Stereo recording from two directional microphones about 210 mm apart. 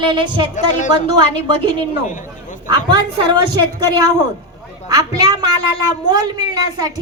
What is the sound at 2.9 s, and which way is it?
A woman's voice, 20° right (ahead or behind).